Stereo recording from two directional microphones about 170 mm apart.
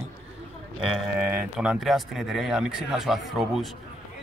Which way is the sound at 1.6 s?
Centre (ahead or behind).